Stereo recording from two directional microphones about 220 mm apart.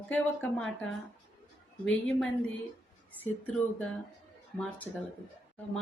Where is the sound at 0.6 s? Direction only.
60° left (ahead or behind).